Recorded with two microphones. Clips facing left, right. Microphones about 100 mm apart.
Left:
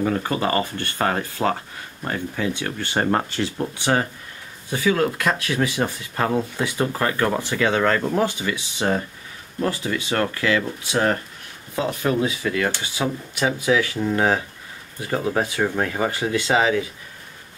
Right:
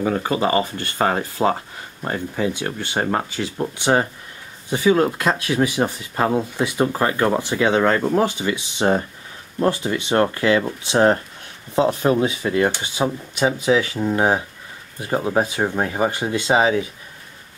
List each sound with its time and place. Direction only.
0.0 s speech: 15° right (ahead or behind)
2.9 s speech: 5° right (ahead or behind)
3.8 s speech: 20° right (ahead or behind)